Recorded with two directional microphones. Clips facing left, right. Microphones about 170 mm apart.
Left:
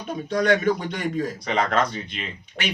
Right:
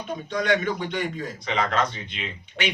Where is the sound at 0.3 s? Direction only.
40° left (ahead or behind).